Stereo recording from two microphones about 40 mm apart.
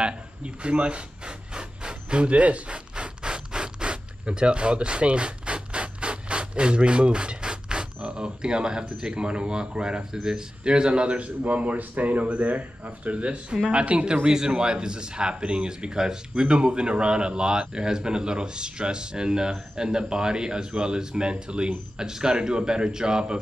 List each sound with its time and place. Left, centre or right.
0.0 s pant: right
10.2 s speech: centre
14.2 s speech: centre